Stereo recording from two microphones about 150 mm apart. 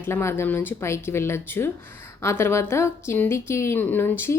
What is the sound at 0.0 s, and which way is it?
A woman's voice, 15° left (ahead or behind).